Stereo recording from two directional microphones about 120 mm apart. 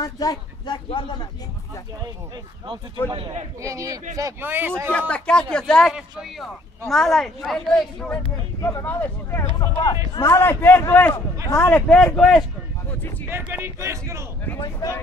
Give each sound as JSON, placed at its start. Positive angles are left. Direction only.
{"t": 0.0, "sound": "speech", "side_deg": 35}
{"t": 0.8, "sound": "speech", "side_deg": 45}
{"t": 3.1, "sound": "a man's voice", "side_deg": -40}
{"t": 3.6, "sound": "a man's voice", "side_deg": -25}
{"t": 4.9, "sound": "speech", "side_deg": 10}
{"t": 5.9, "sound": "speech", "side_deg": -5}
{"t": 8.5, "sound": "speech", "side_deg": 25}
{"t": 11.7, "sound": "speech", "side_deg": 5}
{"t": 13.3, "sound": "speech", "side_deg": -15}
{"t": 14.6, "sound": "speech", "side_deg": 35}